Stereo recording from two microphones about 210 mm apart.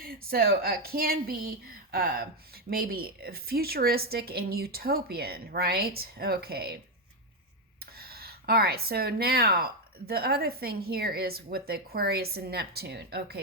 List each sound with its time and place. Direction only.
0.0 s speech: 45° right (ahead or behind)
7.9 s speech: 45° right (ahead or behind)